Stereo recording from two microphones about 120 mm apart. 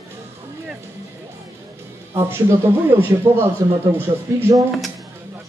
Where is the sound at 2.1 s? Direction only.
20° right (ahead or behind).